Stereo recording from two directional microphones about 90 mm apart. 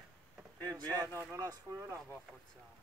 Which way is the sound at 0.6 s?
45° right (ahead or behind).